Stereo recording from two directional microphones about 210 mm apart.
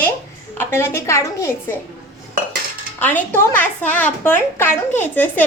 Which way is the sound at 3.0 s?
10° left (ahead or behind).